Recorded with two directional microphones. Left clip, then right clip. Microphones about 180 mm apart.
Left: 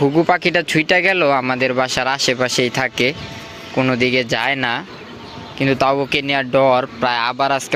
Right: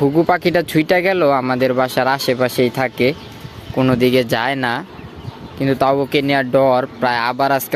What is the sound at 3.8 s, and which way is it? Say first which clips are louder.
Speech: right 2 dB; 15° right (ahead or behind).